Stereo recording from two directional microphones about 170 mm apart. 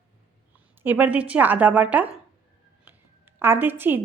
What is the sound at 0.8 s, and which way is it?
A woman's voice, 10° right (ahead or behind).